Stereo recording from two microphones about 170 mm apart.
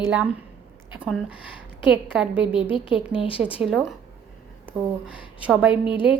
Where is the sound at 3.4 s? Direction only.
5° right (ahead or behind).